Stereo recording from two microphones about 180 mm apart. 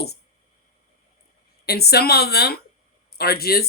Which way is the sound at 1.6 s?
60° left (ahead or behind).